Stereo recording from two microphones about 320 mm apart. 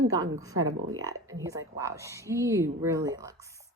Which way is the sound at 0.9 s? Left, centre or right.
Centre.